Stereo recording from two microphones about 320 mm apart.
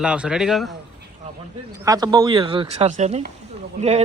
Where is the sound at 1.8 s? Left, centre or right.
Centre.